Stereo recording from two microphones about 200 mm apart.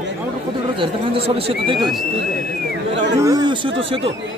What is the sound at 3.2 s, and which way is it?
Speech, 20° right (ahead or behind).